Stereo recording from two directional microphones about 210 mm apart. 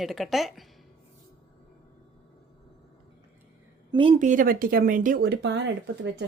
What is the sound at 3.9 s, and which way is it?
Speech, 30° right (ahead or behind).